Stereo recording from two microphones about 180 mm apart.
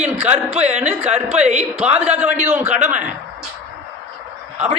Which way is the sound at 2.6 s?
40° right (ahead or behind).